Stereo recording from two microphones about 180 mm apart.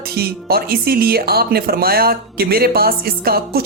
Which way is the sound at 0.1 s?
60° right (ahead or behind).